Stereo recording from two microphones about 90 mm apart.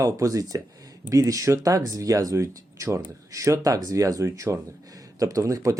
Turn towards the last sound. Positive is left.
turn(degrees=-40)  # may be behind; listen again after turning